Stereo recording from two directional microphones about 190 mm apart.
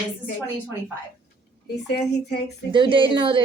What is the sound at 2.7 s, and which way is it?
Speech, 25° right (ahead or behind).